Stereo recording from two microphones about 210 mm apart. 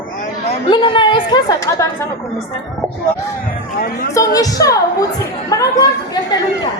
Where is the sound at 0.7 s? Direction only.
25° left (ahead or behind).